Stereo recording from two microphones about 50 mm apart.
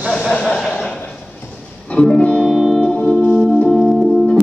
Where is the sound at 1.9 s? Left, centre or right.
Centre.